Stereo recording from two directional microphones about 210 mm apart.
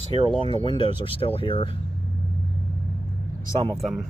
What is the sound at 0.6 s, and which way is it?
Speech, 25° left (ahead or behind).